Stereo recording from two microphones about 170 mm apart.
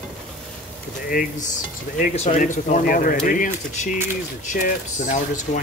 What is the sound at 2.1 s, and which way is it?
Speech, 40° left (ahead or behind).